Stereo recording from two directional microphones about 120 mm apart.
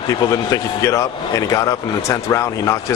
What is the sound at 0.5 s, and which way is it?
Speech, 25° left (ahead or behind).